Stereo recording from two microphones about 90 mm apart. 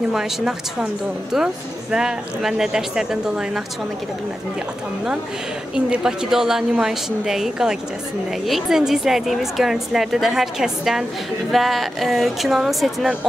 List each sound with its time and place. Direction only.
0.1 s speech: 5° right (ahead or behind)
5.8 s speech: 10° right (ahead or behind)